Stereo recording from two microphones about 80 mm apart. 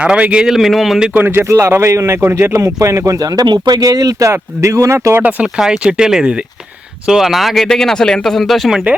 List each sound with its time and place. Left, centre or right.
0.0 s speech: centre
1.1 s speech: right
3.4 s speech: right
3.8 s speech: right
4.3 s speech: right
5.5 s speech: centre